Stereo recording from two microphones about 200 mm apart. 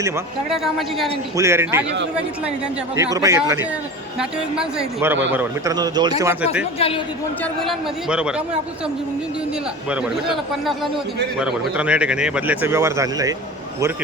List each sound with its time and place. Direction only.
0.5 s speech: centre (ahead or behind)
1.4 s speech: 15° right (ahead or behind)
2.9 s speech: 15° right (ahead or behind)
4.2 s speech: 5° right (ahead or behind)
5.7 s speech: 20° right (ahead or behind)
6.4 s speech: 5° right (ahead or behind)
6.7 s a man's voice: 30° left (ahead or behind)
7.4 s speech: centre (ahead or behind)
9.9 s speech: 5° right (ahead or behind)